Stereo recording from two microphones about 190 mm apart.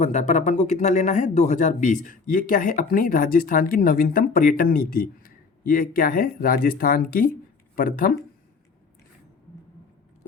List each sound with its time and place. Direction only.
0.0 s speech: 40° left (ahead or behind)